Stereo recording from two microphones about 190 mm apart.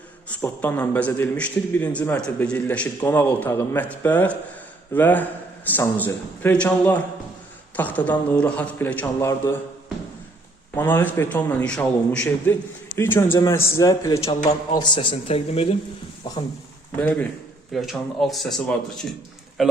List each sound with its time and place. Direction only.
0.3 s a man's voice: 10° left (ahead or behind)
10.8 s a man's voice: 10° left (ahead or behind)
14.8 s speech: 30° left (ahead or behind)
17.0 s a man's voice: 5° left (ahead or behind)